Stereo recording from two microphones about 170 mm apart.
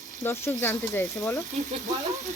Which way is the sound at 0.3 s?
15° left (ahead or behind).